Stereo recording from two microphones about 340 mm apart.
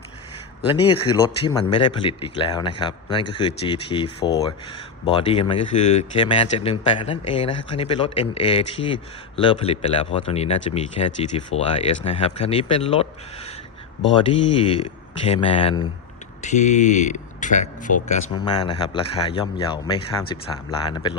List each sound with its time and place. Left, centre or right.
1.1 s speech: centre